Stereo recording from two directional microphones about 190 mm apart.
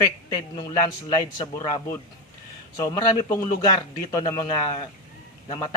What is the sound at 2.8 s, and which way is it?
A man's voice, 15° left (ahead or behind).